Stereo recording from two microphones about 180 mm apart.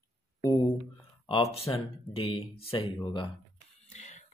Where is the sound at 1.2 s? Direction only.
30° left (ahead or behind).